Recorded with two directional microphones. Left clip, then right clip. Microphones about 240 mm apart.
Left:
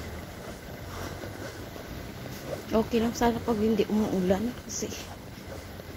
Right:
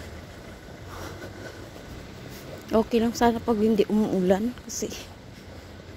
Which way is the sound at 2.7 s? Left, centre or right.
Right.